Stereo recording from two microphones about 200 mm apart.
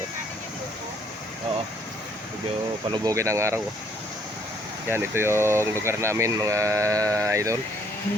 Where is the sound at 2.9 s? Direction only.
15° right (ahead or behind).